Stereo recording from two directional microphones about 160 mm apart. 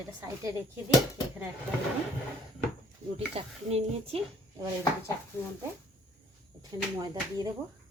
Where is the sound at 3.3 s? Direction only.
40° right (ahead or behind).